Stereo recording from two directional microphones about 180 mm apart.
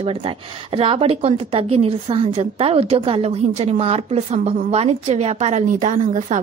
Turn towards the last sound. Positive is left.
turn(degrees=-45)  # may be behind; listen again after turning